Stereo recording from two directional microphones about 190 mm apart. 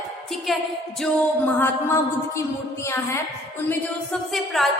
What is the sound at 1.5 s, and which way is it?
Music, 10° left (ahead or behind).